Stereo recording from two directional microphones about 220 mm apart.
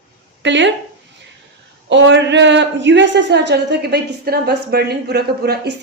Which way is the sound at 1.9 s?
55° right (ahead or behind).